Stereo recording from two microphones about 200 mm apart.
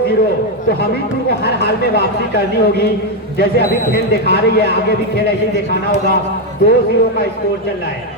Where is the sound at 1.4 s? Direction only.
55° left (ahead or behind).